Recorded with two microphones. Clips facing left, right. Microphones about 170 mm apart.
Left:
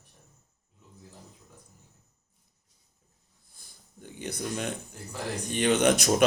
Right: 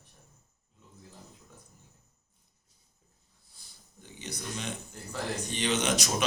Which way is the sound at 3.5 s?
50° left (ahead or behind).